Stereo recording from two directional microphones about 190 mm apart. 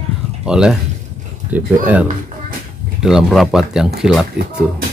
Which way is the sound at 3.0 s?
Centre (ahead or behind).